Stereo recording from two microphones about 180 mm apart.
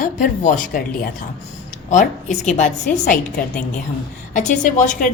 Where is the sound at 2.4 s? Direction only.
40° left (ahead or behind).